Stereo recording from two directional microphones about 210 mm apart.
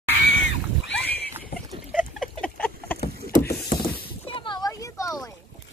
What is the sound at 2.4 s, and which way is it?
Boat, 5° left (ahead or behind).